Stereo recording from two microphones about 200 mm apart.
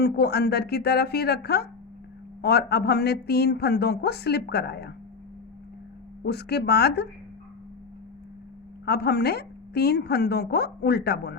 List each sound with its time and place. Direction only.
0.0 s speech: 50° left (ahead or behind)
6.2 s speech: 55° left (ahead or behind)
8.9 s speech: 55° left (ahead or behind)